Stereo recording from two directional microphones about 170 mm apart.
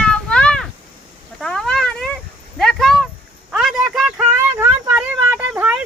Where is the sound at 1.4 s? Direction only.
5° left (ahead or behind).